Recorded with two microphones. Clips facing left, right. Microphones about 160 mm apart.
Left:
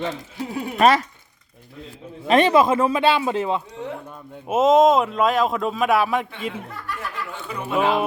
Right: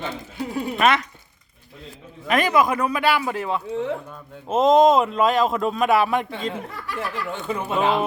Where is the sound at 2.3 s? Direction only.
25° left (ahead or behind).